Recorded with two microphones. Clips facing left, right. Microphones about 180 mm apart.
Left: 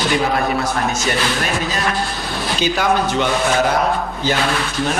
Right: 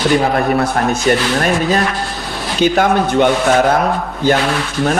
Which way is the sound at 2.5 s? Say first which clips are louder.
Right 5 dB; 55° right (ahead or behind).